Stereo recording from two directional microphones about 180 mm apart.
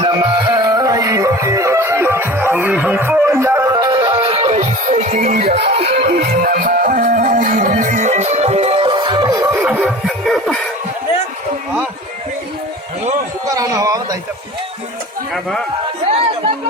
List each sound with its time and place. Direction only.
0.0 s music: 25° right (ahead or behind)
4.2 s music: 35° right (ahead or behind)
6.0 s music: 60° right (ahead or behind); by 9.6 s 20° right (ahead or behind)
9.6 s music: 5° right (ahead or behind)
13.5 s a sound: 20° right (ahead or behind)